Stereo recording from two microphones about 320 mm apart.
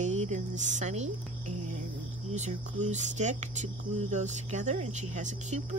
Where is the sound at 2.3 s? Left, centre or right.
Right.